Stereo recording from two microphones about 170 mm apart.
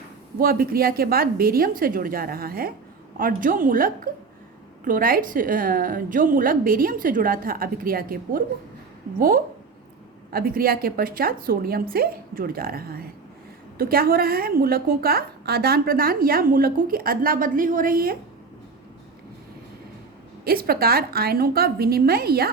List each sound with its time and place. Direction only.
0.3 s a woman's voice: 60° right (ahead or behind)
20.4 s a woman's voice: 65° right (ahead or behind)